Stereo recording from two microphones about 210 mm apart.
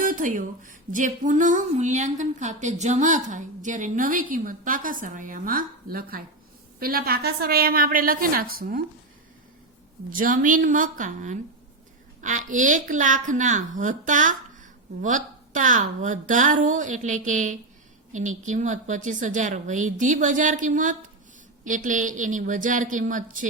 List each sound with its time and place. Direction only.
0.0 s a woman's voice: 40° right (ahead or behind)
10.1 s speech: 40° right (ahead or behind)